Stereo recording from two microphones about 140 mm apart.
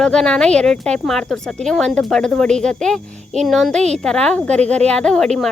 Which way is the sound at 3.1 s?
55° right (ahead or behind).